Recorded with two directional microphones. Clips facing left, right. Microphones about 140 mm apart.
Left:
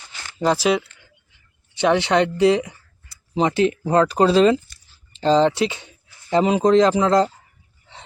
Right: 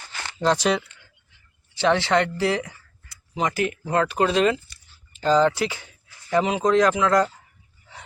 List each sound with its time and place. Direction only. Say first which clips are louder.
0.3 s speech: left 2 dB; 5° left (ahead or behind)
1.7 s speech: left 2 dB; 20° left (ahead or behind)
6.4 s speech: left 5 dB; 35° left (ahead or behind)